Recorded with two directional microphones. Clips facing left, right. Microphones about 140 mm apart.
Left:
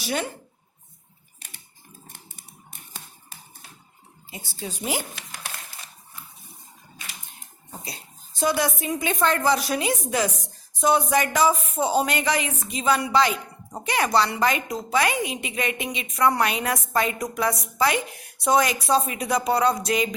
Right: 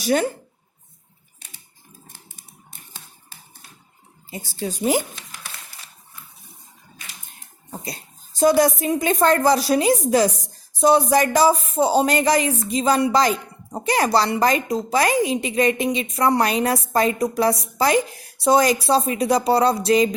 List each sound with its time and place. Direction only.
0.0 s speech: 45° right (ahead or behind)
4.3 s a woman's voice: 40° right (ahead or behind)
8.4 s speech: 40° right (ahead or behind)